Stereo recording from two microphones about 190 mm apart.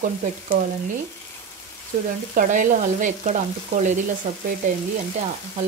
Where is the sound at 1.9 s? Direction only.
40° right (ahead or behind).